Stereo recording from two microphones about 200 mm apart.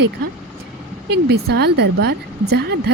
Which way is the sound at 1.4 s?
55° right (ahead or behind).